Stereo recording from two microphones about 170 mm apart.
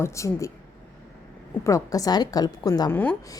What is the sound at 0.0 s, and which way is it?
Speech, 20° left (ahead or behind).